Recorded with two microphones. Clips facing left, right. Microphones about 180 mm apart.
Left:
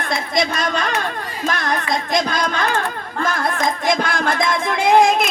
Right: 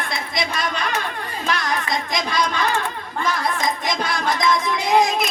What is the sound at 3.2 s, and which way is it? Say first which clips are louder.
Child singing: left 2 dB; 50° left (ahead or behind).